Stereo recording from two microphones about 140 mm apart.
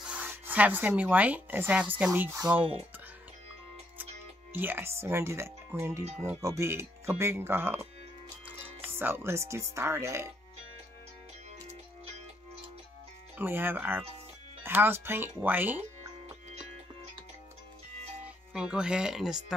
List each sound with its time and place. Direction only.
0.0 s speech: 10° right (ahead or behind)
4.0 s speech: 15° right (ahead or behind)
13.4 s speech: 15° right (ahead or behind)
18.2 s speech: 5° right (ahead or behind)